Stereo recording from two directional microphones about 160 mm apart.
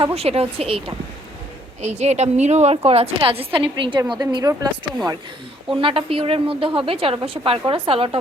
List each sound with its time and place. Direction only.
0.0 s a woman's voice: 40° right (ahead or behind)
5.7 s a woman's voice: 35° right (ahead or behind)